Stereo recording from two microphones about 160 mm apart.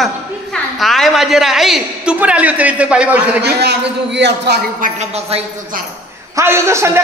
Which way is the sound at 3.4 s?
90° right.